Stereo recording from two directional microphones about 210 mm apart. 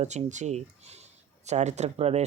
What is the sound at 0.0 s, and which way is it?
Speech, 35° right (ahead or behind).